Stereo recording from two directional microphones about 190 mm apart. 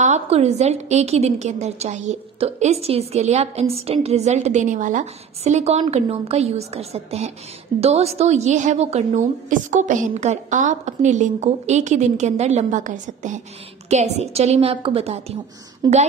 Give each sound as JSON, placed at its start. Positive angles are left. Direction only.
{"t": 0.0, "sound": "a woman's voice", "side_deg": -35}
{"t": 15.8, "sound": "a woman's voice", "side_deg": -20}